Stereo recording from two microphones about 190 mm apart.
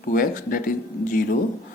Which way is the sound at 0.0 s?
50° left (ahead or behind).